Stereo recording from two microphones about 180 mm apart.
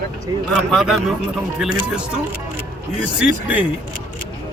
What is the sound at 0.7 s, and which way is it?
Speech, centre (ahead or behind).